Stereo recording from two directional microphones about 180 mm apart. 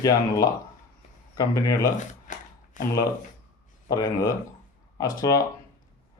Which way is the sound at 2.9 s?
15° left (ahead or behind).